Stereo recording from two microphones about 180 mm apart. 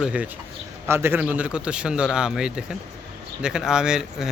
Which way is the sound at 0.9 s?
15° right (ahead or behind).